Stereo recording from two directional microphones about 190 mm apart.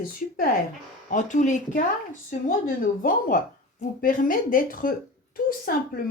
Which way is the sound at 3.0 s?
45° left (ahead or behind).